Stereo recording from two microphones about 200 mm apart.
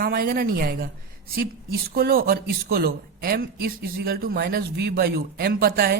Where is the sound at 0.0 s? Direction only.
50° right (ahead or behind).